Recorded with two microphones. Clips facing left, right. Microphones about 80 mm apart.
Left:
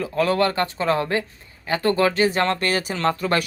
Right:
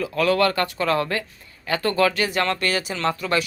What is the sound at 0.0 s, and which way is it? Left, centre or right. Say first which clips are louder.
Speech: even; left.